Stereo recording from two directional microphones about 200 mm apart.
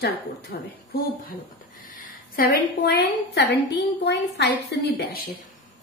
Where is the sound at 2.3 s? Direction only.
50° left (ahead or behind).